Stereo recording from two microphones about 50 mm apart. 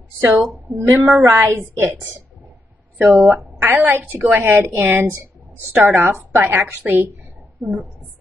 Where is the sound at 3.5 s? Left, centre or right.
Right.